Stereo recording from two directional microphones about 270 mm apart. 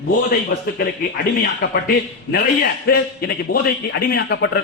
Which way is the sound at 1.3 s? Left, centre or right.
Left.